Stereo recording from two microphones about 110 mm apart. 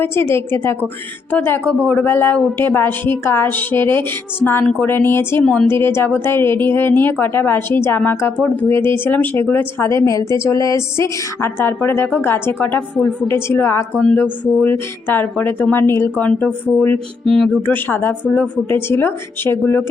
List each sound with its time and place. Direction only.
0.0 s a woman's voice: 20° left (ahead or behind)
17.2 s a woman's voice: 5° left (ahead or behind)